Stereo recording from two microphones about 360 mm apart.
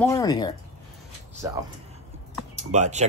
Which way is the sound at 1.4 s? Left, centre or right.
Centre.